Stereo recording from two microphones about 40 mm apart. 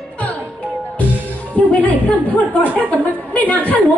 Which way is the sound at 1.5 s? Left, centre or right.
Left.